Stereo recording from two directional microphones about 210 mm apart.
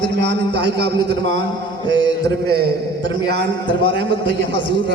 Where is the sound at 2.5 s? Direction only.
50° right (ahead or behind).